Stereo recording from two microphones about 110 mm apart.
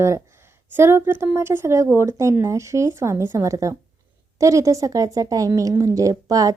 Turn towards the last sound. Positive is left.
turn(degrees=-30)  # may be behind; listen again after turning